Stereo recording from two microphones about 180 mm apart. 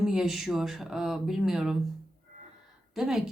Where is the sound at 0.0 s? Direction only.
5° right (ahead or behind).